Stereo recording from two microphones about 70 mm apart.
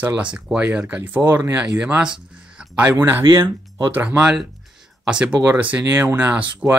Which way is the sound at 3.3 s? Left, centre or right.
Right.